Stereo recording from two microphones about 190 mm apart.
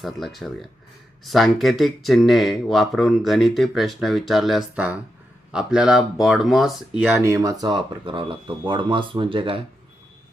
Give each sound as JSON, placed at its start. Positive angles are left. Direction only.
{"t": 0.0, "sound": "speech", "side_deg": 0}
{"t": 7.0, "sound": "speech", "side_deg": -15}